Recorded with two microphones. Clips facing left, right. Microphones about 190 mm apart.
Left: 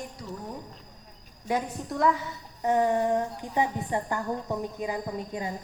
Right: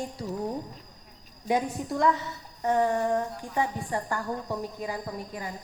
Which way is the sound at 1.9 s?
5° left (ahead or behind).